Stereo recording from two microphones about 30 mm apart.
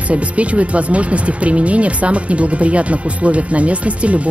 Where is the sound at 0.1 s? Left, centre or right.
Right.